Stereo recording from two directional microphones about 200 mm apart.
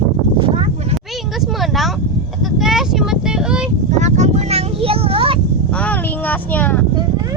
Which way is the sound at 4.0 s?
35° right (ahead or behind).